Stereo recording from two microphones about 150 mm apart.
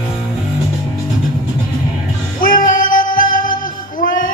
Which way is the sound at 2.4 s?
65° left (ahead or behind).